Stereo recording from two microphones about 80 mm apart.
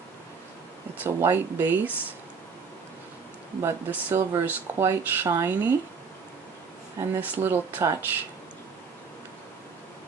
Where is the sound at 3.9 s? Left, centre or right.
Right.